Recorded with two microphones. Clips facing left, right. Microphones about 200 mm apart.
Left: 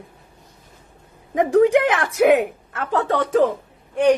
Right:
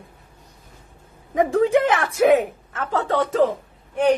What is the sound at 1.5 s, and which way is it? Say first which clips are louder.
Speech: left 4 dB; 15° left (ahead or behind).